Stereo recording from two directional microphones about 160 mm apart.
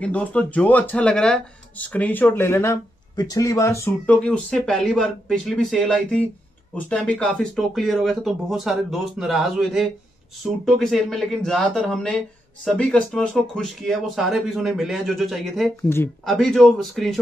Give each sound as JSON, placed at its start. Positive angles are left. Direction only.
{"t": 0.0, "sound": "speech", "side_deg": 10}
{"t": 15.7, "sound": "speech", "side_deg": 15}
{"t": 16.3, "sound": "speech", "side_deg": 0}